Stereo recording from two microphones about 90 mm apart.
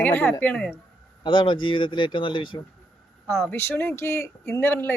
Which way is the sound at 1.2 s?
65° left (ahead or behind).